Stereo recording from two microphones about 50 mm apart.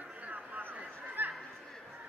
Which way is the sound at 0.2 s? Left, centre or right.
Right.